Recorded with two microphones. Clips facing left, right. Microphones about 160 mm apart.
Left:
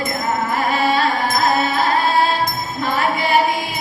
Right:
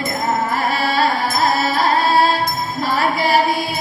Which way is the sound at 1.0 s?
35° right (ahead or behind).